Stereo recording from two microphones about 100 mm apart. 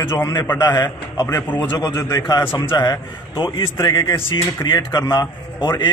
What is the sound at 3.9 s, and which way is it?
A man's voice, 35° left (ahead or behind).